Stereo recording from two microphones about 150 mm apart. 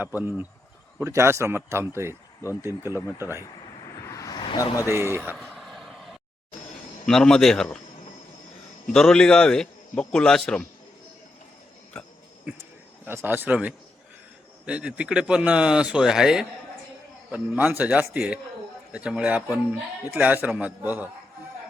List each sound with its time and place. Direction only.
0.0 s speech: 10° right (ahead or behind)
4.1 s a sound: 25° left (ahead or behind)
5.1 s speech: 15° right (ahead or behind)
5.4 s vehicle: centre (ahead or behind)
7.0 s a man's voice: 5° left (ahead or behind)
8.9 s a man's voice: 5° left (ahead or behind)
13.1 s speech: 15° right (ahead or behind)